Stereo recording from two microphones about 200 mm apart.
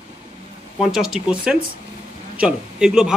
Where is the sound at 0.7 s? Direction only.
Centre (ahead or behind).